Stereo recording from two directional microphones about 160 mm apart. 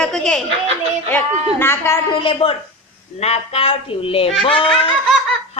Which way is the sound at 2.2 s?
35° left (ahead or behind).